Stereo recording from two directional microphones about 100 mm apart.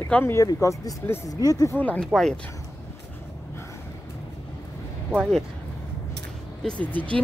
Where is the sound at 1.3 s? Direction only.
35° left (ahead or behind).